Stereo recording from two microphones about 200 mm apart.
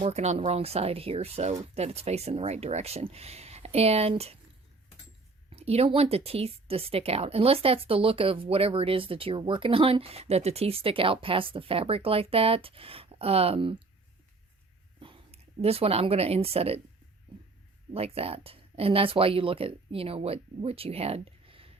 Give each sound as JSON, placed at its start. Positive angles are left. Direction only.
{"t": 0.0, "sound": "speech", "side_deg": -35}
{"t": 5.5, "sound": "speech", "side_deg": -30}
{"t": 14.9, "sound": "speech", "side_deg": -25}
{"t": 17.9, "sound": "speech", "side_deg": -30}